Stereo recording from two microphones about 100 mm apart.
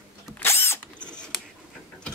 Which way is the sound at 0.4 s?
25° left (ahead or behind).